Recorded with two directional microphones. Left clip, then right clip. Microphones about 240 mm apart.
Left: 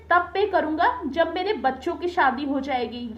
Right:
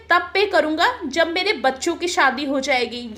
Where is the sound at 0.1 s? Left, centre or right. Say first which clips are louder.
Right 3 dB; right.